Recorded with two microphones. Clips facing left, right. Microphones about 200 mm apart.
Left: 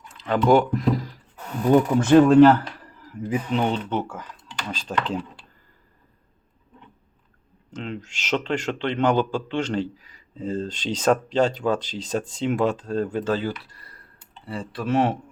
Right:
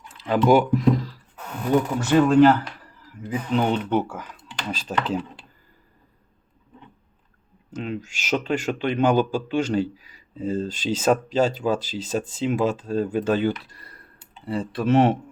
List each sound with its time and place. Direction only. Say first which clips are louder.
0.2 s speech: even; 5° right (ahead or behind)
2.0 s speech: left 3 dB; 45° left (ahead or behind)
3.5 s speech: right 4 dB; centre (ahead or behind)
7.7 s speech: right 3 dB; 10° right (ahead or behind)